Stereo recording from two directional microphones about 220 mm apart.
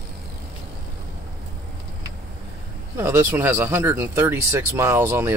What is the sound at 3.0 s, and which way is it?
Speech, 10° right (ahead or behind).